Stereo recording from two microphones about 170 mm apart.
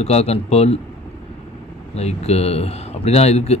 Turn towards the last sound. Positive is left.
turn(degrees=40)  # may be behind; listen again after turning